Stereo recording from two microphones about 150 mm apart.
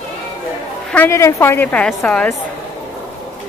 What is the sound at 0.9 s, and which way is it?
Speech, 15° left (ahead or behind).